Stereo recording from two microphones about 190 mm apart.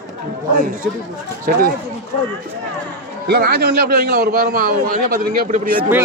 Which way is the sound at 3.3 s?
55° right (ahead or behind).